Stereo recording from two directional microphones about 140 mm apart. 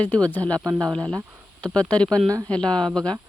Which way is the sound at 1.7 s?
10° left (ahead or behind).